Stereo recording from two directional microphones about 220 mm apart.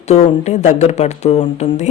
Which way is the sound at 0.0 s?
30° left (ahead or behind).